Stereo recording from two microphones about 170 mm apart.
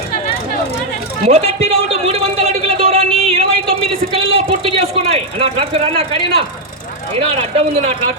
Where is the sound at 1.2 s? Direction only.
40° right (ahead or behind).